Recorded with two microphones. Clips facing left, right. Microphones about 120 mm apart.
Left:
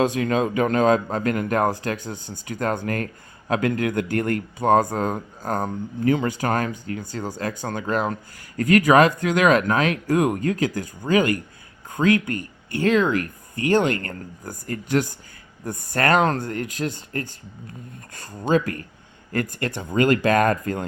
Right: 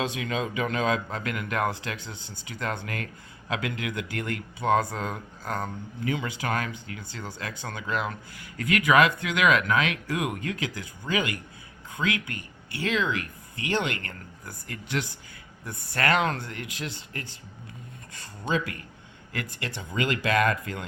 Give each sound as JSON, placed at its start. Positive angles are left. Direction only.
{"t": 0.0, "sound": "speech", "side_deg": 45}